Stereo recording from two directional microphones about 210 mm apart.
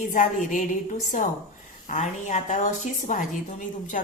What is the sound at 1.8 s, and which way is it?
A woman's voice, 35° left (ahead or behind).